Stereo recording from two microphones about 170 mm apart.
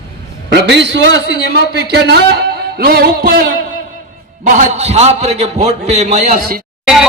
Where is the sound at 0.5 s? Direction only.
90° right; by 3.5 s 60° right (ahead or behind).